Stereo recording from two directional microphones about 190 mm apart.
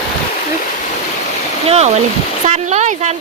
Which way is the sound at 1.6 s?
35° right (ahead or behind).